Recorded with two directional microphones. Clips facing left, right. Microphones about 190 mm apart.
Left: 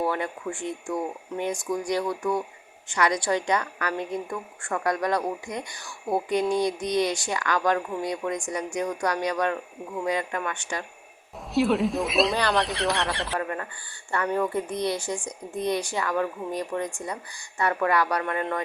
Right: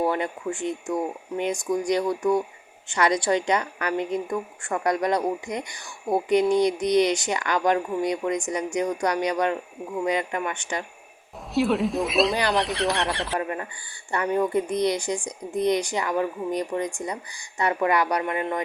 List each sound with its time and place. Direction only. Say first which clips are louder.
0.0 s speech: right 3 dB; 20° right (ahead or behind)
11.5 s speech: even; centre (ahead or behind)
13.4 s speech: right 1 dB; 15° right (ahead or behind)